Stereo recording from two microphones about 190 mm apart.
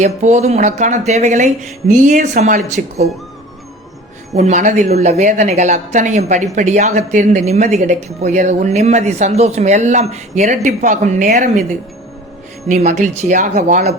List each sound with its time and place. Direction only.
0.0 s speech: 35° right (ahead or behind)
2.8 s speech: 50° right (ahead or behind)
4.4 s speech: 40° right (ahead or behind)
12.6 s speech: 40° right (ahead or behind)